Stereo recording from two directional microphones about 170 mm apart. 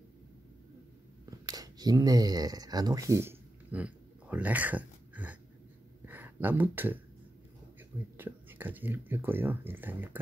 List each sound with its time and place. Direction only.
1.4 s speech: 20° right (ahead or behind)
6.0 s a sound: 10° right (ahead or behind)
8.2 s speech: 10° right (ahead or behind)